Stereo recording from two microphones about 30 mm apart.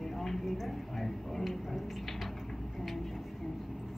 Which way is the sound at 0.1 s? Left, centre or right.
Centre.